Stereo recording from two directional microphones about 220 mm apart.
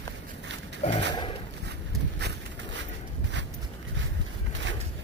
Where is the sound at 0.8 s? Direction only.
30° left (ahead or behind).